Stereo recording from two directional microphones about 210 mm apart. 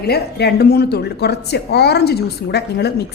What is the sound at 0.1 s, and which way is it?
A woman's voice, 50° left (ahead or behind).